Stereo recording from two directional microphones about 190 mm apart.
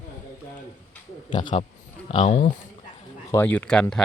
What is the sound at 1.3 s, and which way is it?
Speech, 25° left (ahead or behind).